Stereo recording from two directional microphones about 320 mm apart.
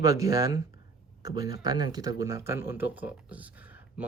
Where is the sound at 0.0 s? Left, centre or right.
Centre.